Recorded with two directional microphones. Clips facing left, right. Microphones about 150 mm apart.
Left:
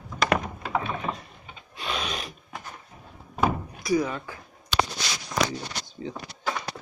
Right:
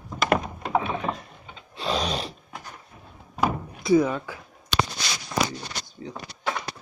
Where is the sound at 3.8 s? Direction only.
25° right (ahead or behind).